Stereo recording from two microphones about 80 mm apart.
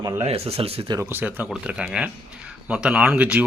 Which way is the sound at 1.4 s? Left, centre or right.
Centre.